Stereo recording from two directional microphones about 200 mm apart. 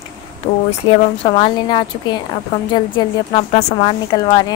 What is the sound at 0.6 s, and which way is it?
Speech, 30° left (ahead or behind).